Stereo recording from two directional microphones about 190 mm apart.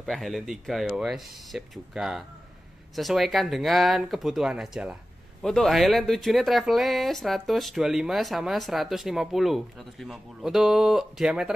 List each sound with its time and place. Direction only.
0.0 s speech: centre (ahead or behind)